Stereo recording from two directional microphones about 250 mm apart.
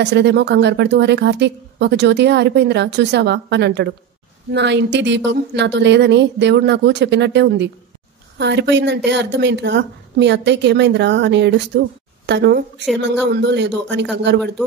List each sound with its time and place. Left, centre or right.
0.0 s speech: right